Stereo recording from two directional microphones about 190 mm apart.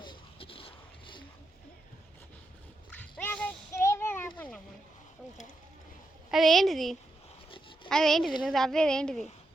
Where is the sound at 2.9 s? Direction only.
10° left (ahead or behind).